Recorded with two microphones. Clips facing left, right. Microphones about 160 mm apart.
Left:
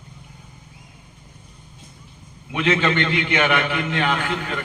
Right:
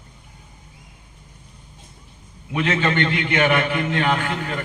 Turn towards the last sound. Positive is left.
turn(degrees=-40)  # may be behind; listen again after turning